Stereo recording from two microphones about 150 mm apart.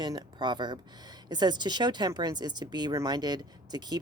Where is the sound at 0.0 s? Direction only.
30° right (ahead or behind).